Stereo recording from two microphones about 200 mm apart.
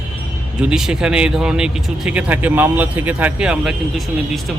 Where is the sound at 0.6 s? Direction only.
5° right (ahead or behind).